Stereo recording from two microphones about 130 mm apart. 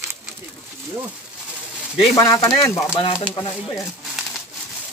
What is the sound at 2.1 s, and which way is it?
Speech, 25° left (ahead or behind).